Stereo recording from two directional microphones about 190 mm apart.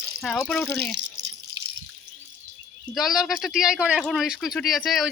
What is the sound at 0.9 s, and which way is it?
Drip, 65° right (ahead or behind).